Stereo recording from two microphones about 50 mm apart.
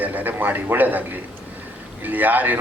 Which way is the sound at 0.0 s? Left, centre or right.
Right.